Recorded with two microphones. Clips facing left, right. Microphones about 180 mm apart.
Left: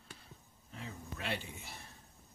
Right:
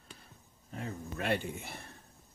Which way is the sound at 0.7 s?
50° right (ahead or behind).